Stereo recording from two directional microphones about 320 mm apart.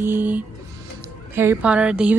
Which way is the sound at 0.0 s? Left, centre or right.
Centre.